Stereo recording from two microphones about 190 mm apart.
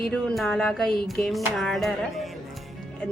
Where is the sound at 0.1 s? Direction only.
5° left (ahead or behind).